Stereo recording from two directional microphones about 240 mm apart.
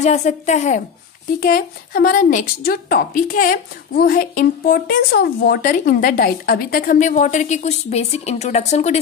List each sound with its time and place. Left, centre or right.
0.0 s a woman's voice: left